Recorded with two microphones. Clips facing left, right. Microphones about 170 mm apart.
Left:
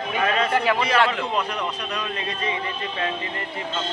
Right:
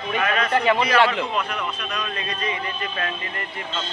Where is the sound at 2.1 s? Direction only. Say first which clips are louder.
Even; 25° left (ahead or behind).